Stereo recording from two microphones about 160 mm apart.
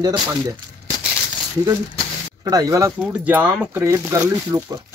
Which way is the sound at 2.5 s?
20° right (ahead or behind).